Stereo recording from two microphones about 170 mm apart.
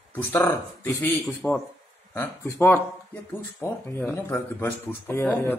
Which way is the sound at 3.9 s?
15° left (ahead or behind).